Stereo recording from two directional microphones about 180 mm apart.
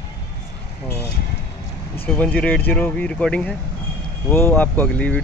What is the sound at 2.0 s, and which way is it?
Speech, 10° left (ahead or behind).